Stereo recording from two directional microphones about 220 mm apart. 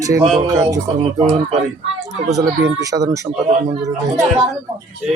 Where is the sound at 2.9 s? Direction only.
15° right (ahead or behind).